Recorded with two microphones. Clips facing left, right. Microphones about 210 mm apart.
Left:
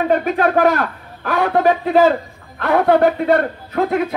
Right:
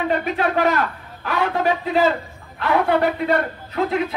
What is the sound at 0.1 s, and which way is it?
A man's voice, 45° left (ahead or behind).